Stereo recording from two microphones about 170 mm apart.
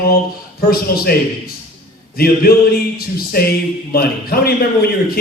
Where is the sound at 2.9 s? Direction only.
65° left (ahead or behind).